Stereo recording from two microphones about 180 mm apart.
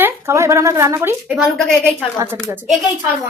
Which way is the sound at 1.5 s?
Centre (ahead or behind).